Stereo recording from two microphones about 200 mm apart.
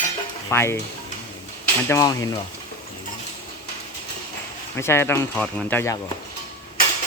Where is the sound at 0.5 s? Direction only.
10° left (ahead or behind).